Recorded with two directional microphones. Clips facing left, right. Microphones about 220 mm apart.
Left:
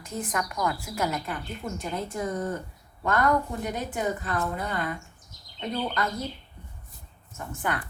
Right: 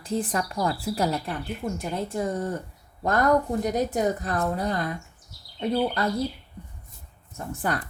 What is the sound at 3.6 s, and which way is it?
Speech, 40° right (ahead or behind).